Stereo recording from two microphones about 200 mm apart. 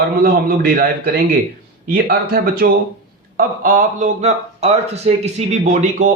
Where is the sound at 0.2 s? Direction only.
50° right (ahead or behind).